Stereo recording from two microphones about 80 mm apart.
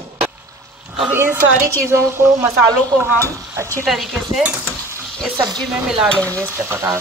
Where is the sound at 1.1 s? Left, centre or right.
Right.